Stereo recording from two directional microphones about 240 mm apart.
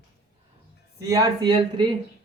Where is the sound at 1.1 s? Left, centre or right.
Centre.